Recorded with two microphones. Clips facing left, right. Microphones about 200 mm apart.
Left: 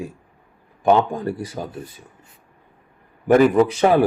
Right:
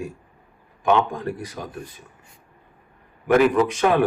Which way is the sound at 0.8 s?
35° left (ahead or behind).